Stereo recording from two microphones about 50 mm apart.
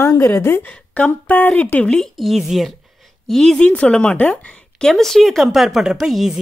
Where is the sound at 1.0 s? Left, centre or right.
Left.